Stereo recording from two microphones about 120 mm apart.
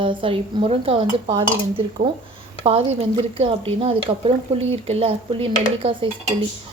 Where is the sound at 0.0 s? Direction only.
45° right (ahead or behind).